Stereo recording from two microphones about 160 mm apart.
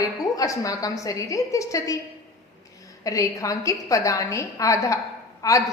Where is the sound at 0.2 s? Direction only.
20° left (ahead or behind).